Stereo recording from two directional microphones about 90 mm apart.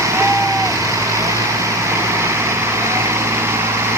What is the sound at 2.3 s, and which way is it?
Vehicle, 30° right (ahead or behind).